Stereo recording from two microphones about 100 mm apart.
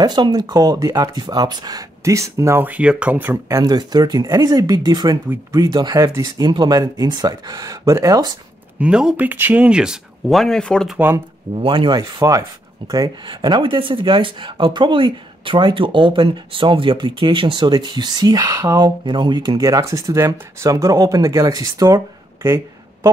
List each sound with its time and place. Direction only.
0.0 s speech: 45° right (ahead or behind)
2.6 s speech: 15° right (ahead or behind); by 3.7 s 30° right (ahead or behind)
3.7 s speech: 45° right (ahead or behind)
5.9 s speech: 35° right (ahead or behind)
8.7 s speech: 10° right (ahead or behind); by 10.9 s 5° left (ahead or behind)
11.5 s speech: 60° right (ahead or behind)
12.0 s speech: 35° right (ahead or behind)
12.9 s speech: 45° right (ahead or behind)
19.0 s speech: 50° right (ahead or behind)